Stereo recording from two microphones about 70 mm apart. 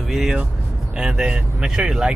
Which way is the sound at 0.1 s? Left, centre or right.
Centre.